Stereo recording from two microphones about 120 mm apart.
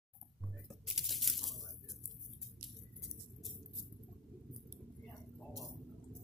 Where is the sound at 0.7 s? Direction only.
Centre (ahead or behind).